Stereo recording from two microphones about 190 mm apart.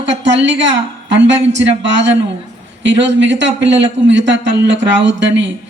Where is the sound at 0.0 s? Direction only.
70° right (ahead or behind).